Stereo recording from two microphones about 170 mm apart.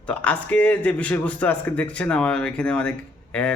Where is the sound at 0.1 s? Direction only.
5° left (ahead or behind).